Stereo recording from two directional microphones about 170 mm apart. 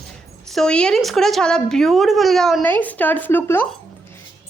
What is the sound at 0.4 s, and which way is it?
A woman's voice, 5° left (ahead or behind).